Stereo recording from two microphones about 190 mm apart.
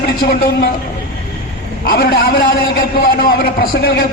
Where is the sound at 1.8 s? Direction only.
50° left (ahead or behind).